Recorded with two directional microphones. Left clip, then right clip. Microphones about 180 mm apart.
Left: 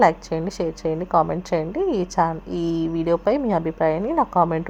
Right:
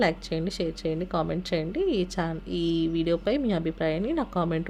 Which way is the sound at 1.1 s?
25° right (ahead or behind).